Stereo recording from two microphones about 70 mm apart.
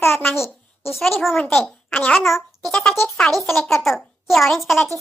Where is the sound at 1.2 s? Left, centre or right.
Centre.